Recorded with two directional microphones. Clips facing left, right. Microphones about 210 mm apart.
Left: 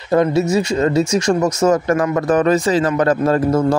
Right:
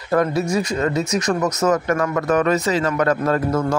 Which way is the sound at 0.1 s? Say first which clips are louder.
Left 4 dB; 25° left (ahead or behind).